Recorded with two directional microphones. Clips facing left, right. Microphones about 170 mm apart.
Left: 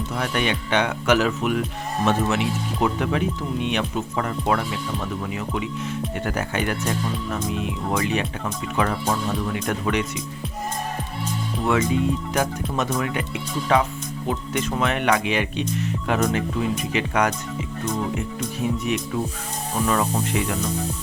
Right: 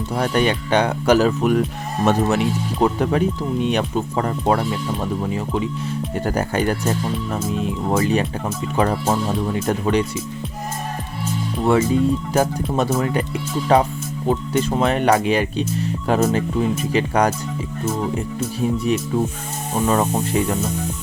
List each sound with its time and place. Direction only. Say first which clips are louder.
0.1 s speech: right 6 dB; 35° right (ahead or behind)
11.6 s speech: right 4 dB; 30° right (ahead or behind)
18.6 s speech: right 4 dB; 35° right (ahead or behind)